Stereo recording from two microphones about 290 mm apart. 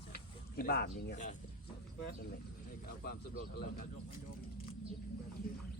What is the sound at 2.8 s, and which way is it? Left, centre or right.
A man's voice, left.